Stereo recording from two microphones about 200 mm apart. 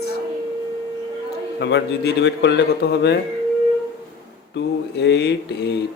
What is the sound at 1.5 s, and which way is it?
Speech, 60° left (ahead or behind).